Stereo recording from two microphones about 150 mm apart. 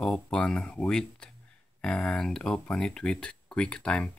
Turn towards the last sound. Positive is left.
turn(degrees=5)  # may be behind; listen again after turning